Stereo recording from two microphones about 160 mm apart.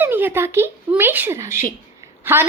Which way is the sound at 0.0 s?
10° right (ahead or behind).